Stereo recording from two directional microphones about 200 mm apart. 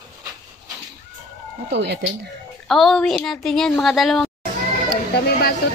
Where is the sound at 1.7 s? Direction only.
60° right (ahead or behind).